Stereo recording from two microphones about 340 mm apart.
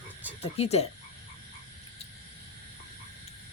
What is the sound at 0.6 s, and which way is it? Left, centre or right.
Speech, centre.